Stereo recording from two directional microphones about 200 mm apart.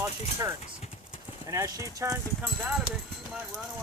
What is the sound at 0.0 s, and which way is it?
Speech, 15° right (ahead or behind).